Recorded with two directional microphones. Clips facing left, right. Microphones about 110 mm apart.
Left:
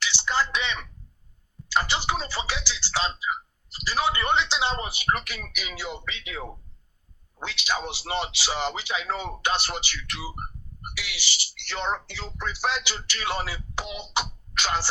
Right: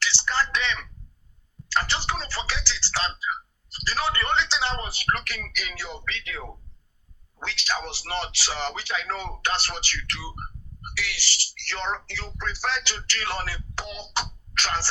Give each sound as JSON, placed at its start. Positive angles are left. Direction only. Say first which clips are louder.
{"t": 0.0, "sound": "a man's voice", "louder": "even", "side_deg": 15}